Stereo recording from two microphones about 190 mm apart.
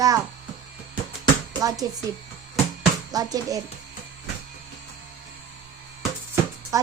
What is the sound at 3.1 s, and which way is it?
Speech, 20° right (ahead or behind).